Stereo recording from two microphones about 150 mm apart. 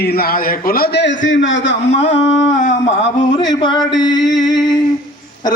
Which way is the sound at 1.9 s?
45° left (ahead or behind).